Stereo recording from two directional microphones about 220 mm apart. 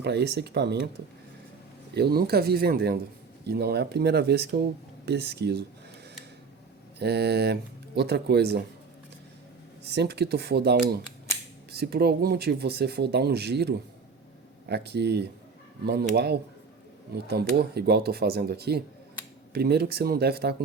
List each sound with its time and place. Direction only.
0.0 s speech: 50° right (ahead or behind)
2.0 s speech: 45° right (ahead or behind)
7.0 s speech: 50° right (ahead or behind)
9.8 s speech: 50° right (ahead or behind)